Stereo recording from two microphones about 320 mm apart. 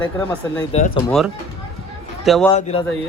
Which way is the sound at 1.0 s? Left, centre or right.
Centre.